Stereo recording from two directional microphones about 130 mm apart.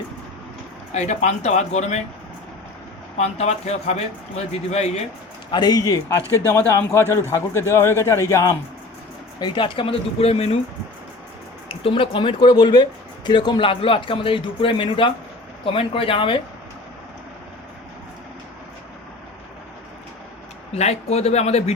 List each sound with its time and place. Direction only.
0.9 s a man's voice: 60° left (ahead or behind)
3.2 s a man's voice: 55° left (ahead or behind)
5.5 s a man's voice: 35° left (ahead or behind)
6.5 s a man's voice: 15° left (ahead or behind)
9.4 s speech: 40° left (ahead or behind)
11.7 s a man's voice: 45° left (ahead or behind)
20.7 s a man's voice: 55° left (ahead or behind)